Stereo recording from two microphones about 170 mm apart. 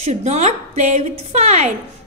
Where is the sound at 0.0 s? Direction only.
40° right (ahead or behind).